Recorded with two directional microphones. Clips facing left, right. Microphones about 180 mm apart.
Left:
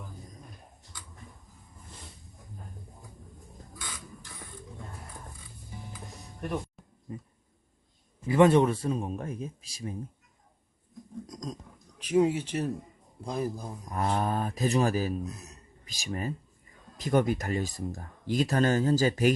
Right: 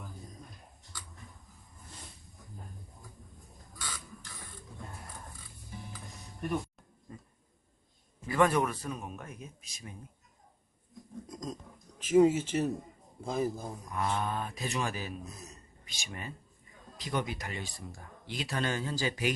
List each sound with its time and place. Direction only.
7.1 s speech: 20° left (ahead or behind)
8.3 s speech: 25° left (ahead or behind)
11.3 s a sound: 5° right (ahead or behind)
12.0 s speech: 5° right (ahead or behind)
13.8 s speech: 40° left (ahead or behind)